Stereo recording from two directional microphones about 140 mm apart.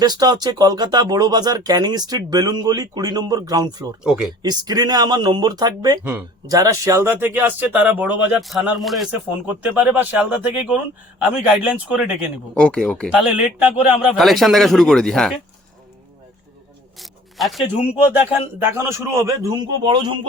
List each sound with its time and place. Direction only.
0.0 s speech: 30° right (ahead or behind)
4.0 s a man's voice: 5° right (ahead or behind)
4.4 s speech: 25° right (ahead or behind); by 8.4 s 10° right (ahead or behind)
8.4 s a man's voice: centre (ahead or behind)
12.5 s speech: 5° left (ahead or behind)
13.1 s a man's voice: 5° right (ahead or behind)
17.0 s zipper: centre (ahead or behind)
18.1 s speech: 15° right (ahead or behind); by 20.1 s 35° right (ahead or behind)